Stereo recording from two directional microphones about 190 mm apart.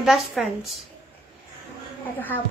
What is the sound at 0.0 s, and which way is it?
Speech, centre (ahead or behind).